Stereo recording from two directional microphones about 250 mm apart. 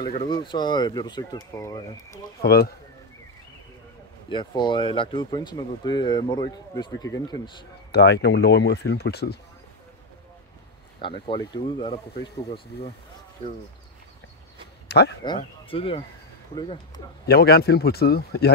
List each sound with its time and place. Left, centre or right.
0.0 s speech: centre
2.4 s speech: left
4.3 s speech: centre
7.9 s speech: left
11.0 s speech: centre
14.9 s speech: left
15.2 s speech: centre
17.3 s speech: left